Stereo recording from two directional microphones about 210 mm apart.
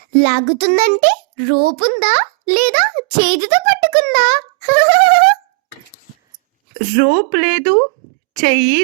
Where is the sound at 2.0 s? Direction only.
45° right (ahead or behind).